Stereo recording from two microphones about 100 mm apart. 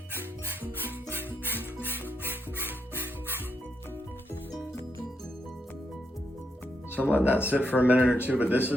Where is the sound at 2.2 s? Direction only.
20° right (ahead or behind).